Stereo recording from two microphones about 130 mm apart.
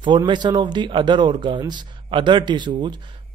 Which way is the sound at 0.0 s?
35° right (ahead or behind).